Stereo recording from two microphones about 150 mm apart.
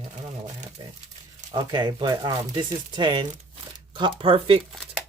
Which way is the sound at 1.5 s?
30° right (ahead or behind).